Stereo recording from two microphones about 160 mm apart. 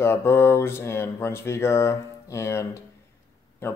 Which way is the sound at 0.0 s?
15° left (ahead or behind).